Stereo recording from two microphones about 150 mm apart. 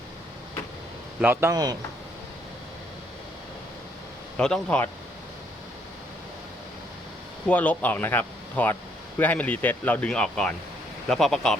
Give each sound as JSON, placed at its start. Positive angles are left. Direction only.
{"t": 1.2, "sound": "a man's voice", "side_deg": -15}
{"t": 4.4, "sound": "speech", "side_deg": 5}
{"t": 7.4, "sound": "speech", "side_deg": 10}